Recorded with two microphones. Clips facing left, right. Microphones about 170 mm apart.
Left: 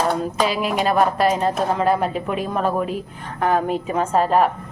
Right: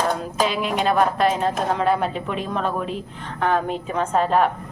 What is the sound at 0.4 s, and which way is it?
A woman's voice, 5° left (ahead or behind).